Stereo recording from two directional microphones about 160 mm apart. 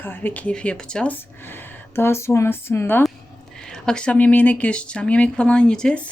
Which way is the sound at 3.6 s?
5° left (ahead or behind).